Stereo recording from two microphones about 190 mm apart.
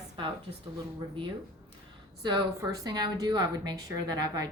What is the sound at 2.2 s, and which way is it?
Speech, 20° right (ahead or behind).